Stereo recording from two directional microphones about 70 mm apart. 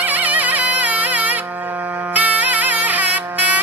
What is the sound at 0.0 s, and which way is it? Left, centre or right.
Music, right.